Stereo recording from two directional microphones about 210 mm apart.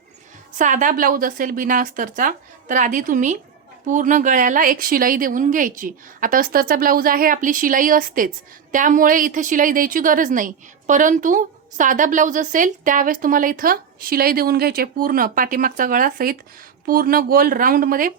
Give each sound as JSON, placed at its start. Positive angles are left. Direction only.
{"t": 0.6, "sound": "a woman's voice", "side_deg": -35}